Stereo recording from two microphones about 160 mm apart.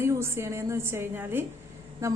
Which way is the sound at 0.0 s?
15° right (ahead or behind).